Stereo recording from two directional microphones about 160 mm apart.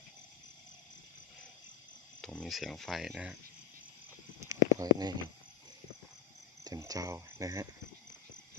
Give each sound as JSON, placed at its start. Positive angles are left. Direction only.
{"t": 2.2, "sound": "speech", "side_deg": 5}
{"t": 4.8, "sound": "speech", "side_deg": -25}
{"t": 6.7, "sound": "speech", "side_deg": -20}